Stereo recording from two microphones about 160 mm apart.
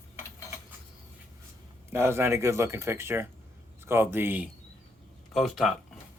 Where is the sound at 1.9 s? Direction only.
15° right (ahead or behind).